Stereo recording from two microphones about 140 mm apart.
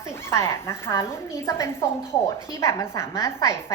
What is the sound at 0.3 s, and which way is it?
A woman's voice, 20° left (ahead or behind).